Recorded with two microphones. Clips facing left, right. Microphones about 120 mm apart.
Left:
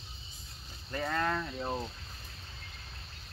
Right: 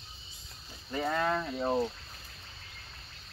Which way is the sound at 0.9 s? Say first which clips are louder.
Right 2 dB; 10° right (ahead or behind).